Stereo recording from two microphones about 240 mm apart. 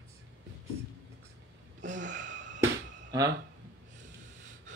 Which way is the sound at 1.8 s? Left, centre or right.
Right.